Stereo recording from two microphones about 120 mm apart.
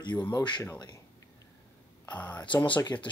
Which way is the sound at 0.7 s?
35° left (ahead or behind).